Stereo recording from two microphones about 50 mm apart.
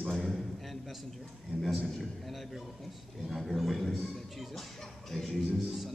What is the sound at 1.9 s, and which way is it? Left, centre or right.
A man's voice, centre.